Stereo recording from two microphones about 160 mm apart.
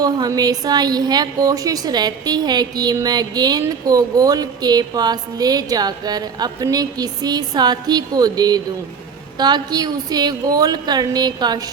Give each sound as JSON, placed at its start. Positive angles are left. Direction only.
{"t": 0.0, "sound": "a woman's voice", "side_deg": -25}